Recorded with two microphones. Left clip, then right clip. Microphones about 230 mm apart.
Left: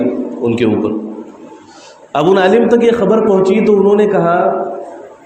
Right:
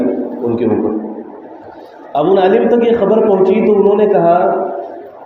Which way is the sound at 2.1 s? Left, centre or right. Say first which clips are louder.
Left 1 dB; left.